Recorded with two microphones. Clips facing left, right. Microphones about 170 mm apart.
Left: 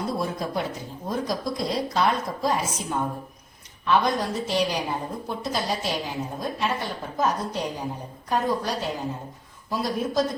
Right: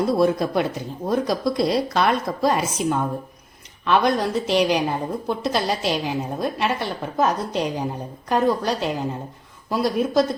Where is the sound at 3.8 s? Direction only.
75° right (ahead or behind).